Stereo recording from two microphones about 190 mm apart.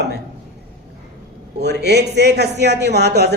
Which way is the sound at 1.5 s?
60° right (ahead or behind).